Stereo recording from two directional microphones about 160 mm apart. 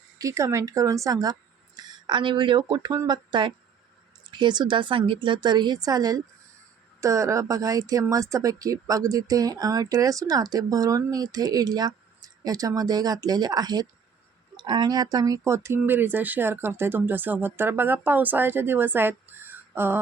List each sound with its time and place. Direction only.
0.2 s speech: 20° right (ahead or behind)